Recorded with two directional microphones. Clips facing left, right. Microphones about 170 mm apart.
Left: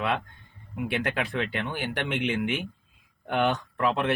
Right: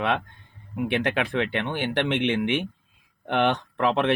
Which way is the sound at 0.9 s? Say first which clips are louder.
Right 4 dB; 60° right (ahead or behind).